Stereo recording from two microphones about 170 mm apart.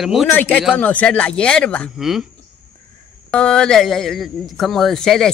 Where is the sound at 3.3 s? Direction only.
5° left (ahead or behind).